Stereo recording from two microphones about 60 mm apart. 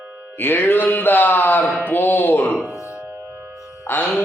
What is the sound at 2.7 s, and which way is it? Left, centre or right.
Music, left.